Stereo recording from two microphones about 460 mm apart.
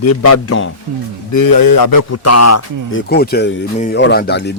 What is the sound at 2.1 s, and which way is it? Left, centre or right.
Speech, left.